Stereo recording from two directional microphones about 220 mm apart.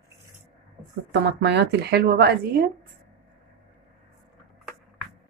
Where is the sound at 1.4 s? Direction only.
50° right (ahead or behind).